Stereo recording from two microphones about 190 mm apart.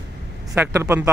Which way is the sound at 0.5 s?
15° right (ahead or behind).